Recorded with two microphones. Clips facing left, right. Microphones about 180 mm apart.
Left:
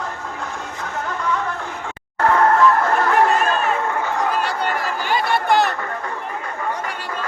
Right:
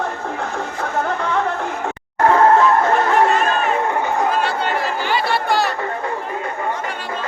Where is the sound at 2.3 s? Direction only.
25° right (ahead or behind).